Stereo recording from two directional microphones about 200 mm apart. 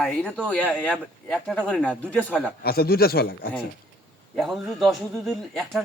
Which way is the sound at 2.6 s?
50° left (ahead or behind).